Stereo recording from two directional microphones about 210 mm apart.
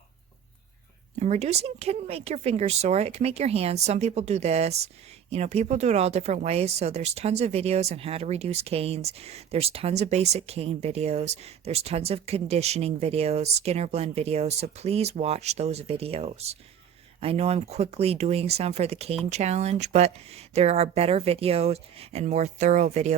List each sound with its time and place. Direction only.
1.2 s speech: 30° right (ahead or behind)